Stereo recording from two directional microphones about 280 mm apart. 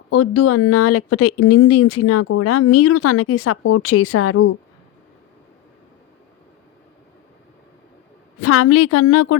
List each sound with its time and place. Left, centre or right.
0.1 s speech: left
8.4 s speech: left